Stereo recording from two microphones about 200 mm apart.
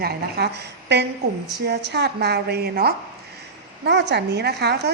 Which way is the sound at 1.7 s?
55° right (ahead or behind).